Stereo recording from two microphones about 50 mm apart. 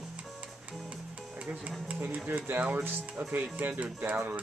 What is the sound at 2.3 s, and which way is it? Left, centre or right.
Speech, right.